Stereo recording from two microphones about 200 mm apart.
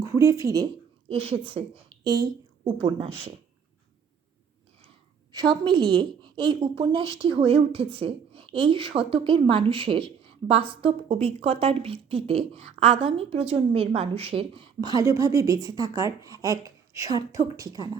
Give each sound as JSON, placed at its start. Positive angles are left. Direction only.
{"t": 0.0, "sound": "speech", "side_deg": -15}
{"t": 5.3, "sound": "a woman's voice", "side_deg": -20}